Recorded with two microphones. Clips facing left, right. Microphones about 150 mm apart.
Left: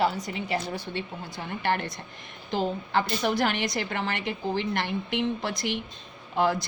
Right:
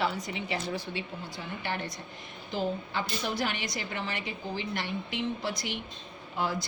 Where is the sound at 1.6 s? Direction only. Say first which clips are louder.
Left 8 dB; 70° left (ahead or behind).